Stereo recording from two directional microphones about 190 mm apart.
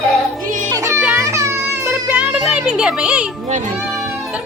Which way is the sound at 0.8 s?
15° right (ahead or behind).